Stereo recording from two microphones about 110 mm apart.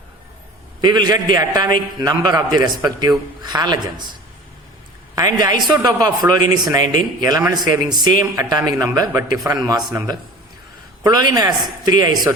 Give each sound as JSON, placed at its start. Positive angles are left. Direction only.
{"t": 0.8, "sound": "a man's voice", "side_deg": -40}
{"t": 5.1, "sound": "a man's voice", "side_deg": -35}